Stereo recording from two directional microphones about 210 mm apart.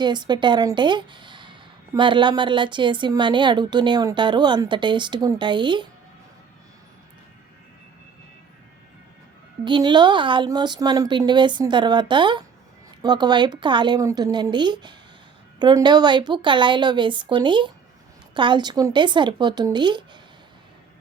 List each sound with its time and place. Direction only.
0.0 s speech: 20° right (ahead or behind)
9.6 s speech: 20° right (ahead or behind)